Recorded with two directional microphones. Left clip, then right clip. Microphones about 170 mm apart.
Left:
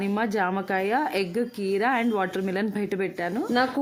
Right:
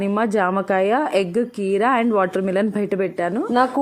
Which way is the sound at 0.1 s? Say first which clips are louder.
Right 6 dB; 10° right (ahead or behind).